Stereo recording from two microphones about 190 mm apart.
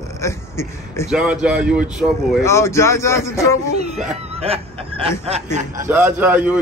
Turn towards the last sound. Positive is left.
turn(degrees=-10)  # may be behind; listen again after turning